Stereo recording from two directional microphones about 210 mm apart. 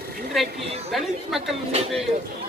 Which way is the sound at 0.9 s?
Centre (ahead or behind).